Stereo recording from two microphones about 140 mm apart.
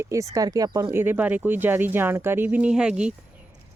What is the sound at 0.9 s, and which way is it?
Speech, 15° right (ahead or behind).